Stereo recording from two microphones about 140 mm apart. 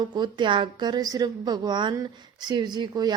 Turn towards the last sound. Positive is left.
turn(degrees=-30)  # may be behind; listen again after turning